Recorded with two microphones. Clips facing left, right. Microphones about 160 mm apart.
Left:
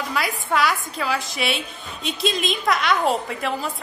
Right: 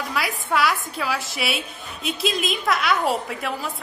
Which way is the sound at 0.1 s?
Centre (ahead or behind).